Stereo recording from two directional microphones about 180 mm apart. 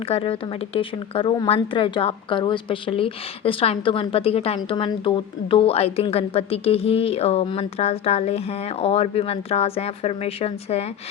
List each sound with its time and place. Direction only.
0.0 s speech: 30° left (ahead or behind)